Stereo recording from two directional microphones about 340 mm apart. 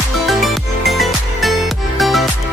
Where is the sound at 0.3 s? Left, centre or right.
Centre.